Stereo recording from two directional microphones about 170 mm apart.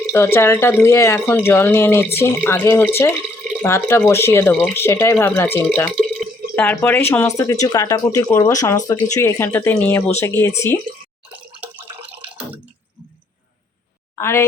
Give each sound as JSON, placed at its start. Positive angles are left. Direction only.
{"t": 0.1, "sound": "speech", "side_deg": 15}
{"t": 14.2, "sound": "speech", "side_deg": 15}